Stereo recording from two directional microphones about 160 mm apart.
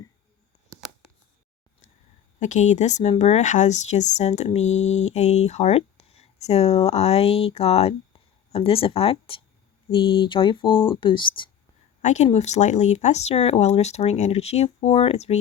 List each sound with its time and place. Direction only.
2.4 s speech: 45° left (ahead or behind); by 11.4 s 30° left (ahead or behind)
12.0 s speech: 45° left (ahead or behind)